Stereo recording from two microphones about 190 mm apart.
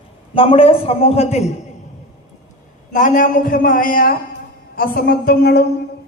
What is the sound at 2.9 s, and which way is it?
A woman's voice, 45° left (ahead or behind).